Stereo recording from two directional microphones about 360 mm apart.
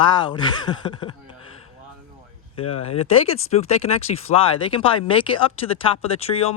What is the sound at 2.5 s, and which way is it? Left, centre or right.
Speech, centre.